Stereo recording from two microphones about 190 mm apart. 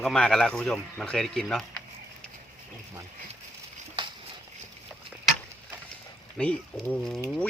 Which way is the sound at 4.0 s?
25° right (ahead or behind).